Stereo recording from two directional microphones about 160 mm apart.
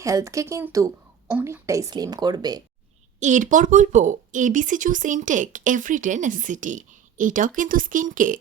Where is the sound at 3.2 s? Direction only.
50° right (ahead or behind).